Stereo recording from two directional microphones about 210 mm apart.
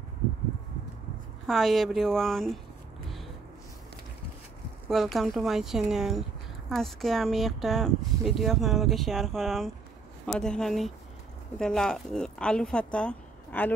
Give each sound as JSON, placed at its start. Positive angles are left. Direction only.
{"t": 1.5, "sound": "speech", "side_deg": 0}
{"t": 4.8, "sound": "speech", "side_deg": 0}